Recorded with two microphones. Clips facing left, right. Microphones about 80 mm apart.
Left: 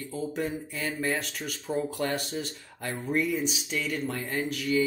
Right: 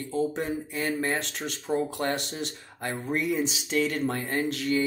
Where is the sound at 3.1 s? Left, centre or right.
Right.